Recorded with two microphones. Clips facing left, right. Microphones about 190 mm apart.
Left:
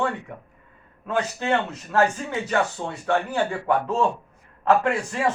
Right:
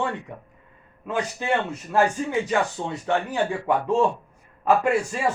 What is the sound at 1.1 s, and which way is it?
A man's voice, 15° right (ahead or behind).